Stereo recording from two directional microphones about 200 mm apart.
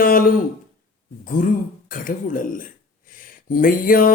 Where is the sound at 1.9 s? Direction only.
40° left (ahead or behind).